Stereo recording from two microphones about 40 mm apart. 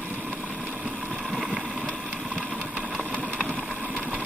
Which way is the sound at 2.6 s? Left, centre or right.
Right.